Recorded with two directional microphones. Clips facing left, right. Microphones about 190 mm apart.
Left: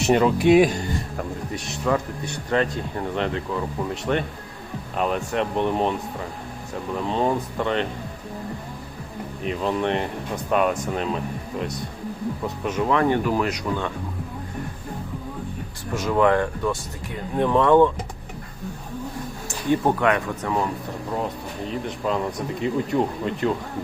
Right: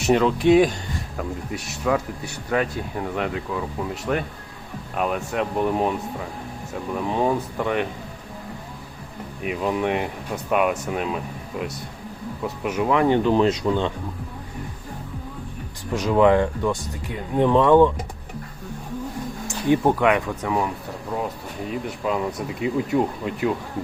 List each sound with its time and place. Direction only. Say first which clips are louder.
0.0 s speech: even; centre (ahead or behind)
1.5 s speech: even; 5° right (ahead or behind)
6.9 s speech: right 1 dB; 10° right (ahead or behind)
9.4 s speech: right 1 dB; 10° right (ahead or behind)
12.6 s speech: right 1 dB; 10° right (ahead or behind)
16.0 s speech: right 2 dB; 15° right (ahead or behind)
19.7 s speech: right 2 dB; 15° right (ahead or behind)
21.7 s speech: even; 5° right (ahead or behind)